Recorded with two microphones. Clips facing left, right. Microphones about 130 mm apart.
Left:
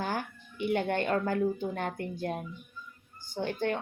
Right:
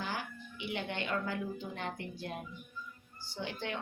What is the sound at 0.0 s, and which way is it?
Speech, 50° left (ahead or behind).